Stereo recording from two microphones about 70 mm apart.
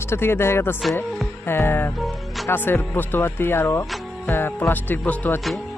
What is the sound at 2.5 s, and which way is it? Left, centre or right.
Speech, left.